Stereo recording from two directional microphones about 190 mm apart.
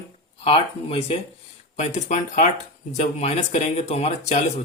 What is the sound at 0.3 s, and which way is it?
Speech, 30° left (ahead or behind).